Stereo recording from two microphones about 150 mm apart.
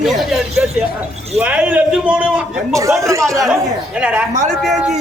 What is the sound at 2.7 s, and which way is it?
Speech, 20° right (ahead or behind).